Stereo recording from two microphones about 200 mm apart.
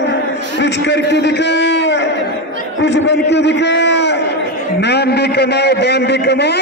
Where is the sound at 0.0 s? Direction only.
60° left (ahead or behind).